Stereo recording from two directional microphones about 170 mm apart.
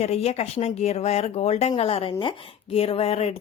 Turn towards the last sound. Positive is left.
turn(degrees=35)  # may be behind; listen again after turning